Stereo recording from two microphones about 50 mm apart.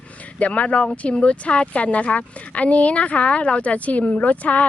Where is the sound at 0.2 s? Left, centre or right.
Left.